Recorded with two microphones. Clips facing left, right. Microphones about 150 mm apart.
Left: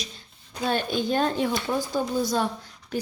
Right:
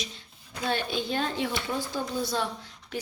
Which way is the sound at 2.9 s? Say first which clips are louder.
Left 5 dB; 40° left (ahead or behind).